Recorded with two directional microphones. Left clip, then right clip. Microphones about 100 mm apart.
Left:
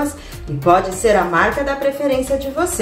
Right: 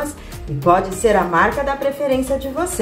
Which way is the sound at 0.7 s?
15° right (ahead or behind).